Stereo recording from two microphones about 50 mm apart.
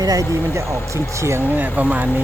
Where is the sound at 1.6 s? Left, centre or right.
Right.